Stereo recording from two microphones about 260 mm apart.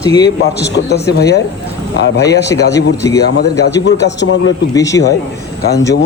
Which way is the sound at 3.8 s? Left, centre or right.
Left.